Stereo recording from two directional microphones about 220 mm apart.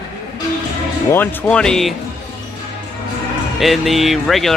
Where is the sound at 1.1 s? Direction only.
10° left (ahead or behind).